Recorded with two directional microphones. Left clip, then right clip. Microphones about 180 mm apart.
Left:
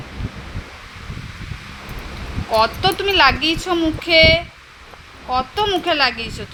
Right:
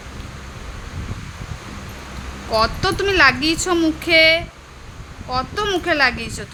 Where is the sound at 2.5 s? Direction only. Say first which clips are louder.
Left 2 dB; 10° right (ahead or behind).